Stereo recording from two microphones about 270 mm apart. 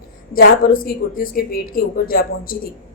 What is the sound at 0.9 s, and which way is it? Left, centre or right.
A woman's voice, left.